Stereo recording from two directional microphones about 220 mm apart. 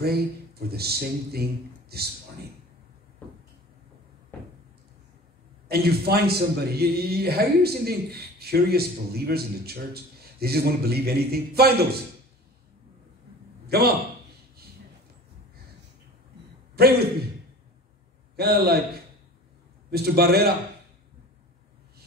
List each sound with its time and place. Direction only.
0.0 s a man's voice: 45° right (ahead or behind)
5.7 s a man's voice: 45° right (ahead or behind)
13.7 s a man's voice: 45° right (ahead or behind)
18.3 s a man's voice: 45° right (ahead or behind)
19.9 s a man's voice: 45° right (ahead or behind)